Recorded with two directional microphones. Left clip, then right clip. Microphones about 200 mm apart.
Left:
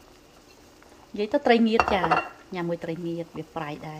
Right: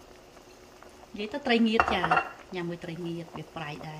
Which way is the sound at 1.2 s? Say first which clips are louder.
Left 6 dB; 20° left (ahead or behind).